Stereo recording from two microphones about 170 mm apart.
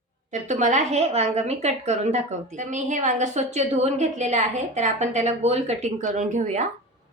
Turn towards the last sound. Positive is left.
turn(degrees=-45)  # may be behind; listen again after turning